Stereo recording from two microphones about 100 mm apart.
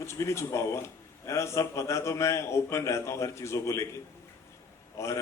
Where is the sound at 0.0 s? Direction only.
30° left (ahead or behind).